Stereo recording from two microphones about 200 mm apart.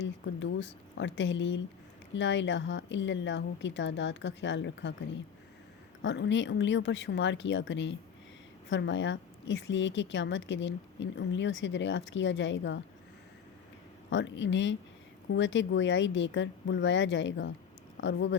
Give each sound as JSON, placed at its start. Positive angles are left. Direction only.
{"t": 0.0, "sound": "a woman's voice", "side_deg": 65}
{"t": 14.1, "sound": "a woman's voice", "side_deg": 65}